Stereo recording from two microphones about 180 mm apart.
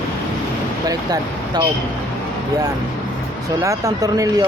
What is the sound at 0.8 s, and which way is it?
Speech, 20° right (ahead or behind).